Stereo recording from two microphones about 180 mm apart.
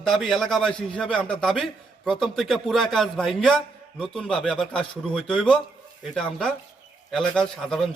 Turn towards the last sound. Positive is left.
turn(degrees=0)  # may be behind; listen again after turning